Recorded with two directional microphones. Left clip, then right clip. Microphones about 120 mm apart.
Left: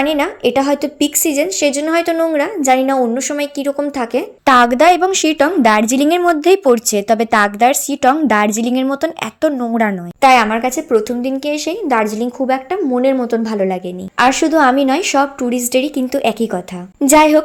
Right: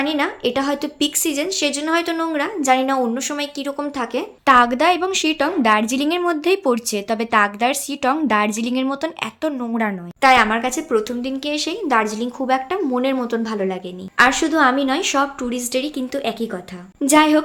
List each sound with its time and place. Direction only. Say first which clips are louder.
0.0 s a woman's voice: left 5 dB; 35° left (ahead or behind)
4.4 s a woman's voice: left 4 dB; 60° left (ahead or behind); by 13.7 s 35° left (ahead or behind)
14.2 s a woman's voice: left 3 dB; 45° left (ahead or behind)
17.0 s a woman's voice: left 5 dB; 45° left (ahead or behind)